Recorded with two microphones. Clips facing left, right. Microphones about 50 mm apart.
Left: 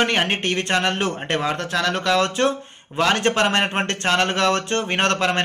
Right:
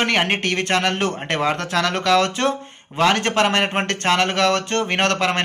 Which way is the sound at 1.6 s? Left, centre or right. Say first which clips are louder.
Right 1 dB; right.